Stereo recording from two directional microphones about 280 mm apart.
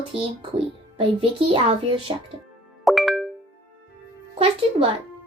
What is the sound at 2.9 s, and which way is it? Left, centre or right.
Music, centre.